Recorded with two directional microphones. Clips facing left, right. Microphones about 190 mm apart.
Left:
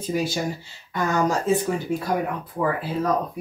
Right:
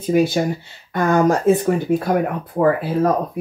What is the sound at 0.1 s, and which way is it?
Speech, 60° right (ahead or behind).